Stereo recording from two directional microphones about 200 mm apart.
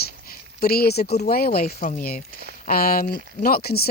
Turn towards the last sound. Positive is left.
turn(degrees=50)  # may be behind; listen again after turning